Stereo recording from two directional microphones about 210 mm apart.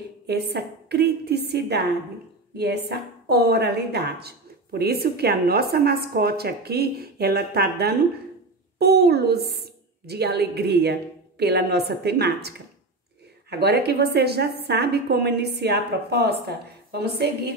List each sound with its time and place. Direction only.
0.3 s a woman's voice: 50° right (ahead or behind)